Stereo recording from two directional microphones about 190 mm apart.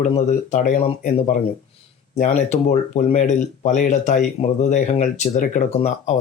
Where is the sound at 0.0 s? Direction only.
40° left (ahead or behind).